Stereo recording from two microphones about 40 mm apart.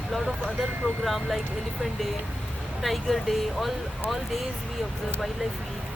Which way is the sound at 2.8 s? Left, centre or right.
Centre.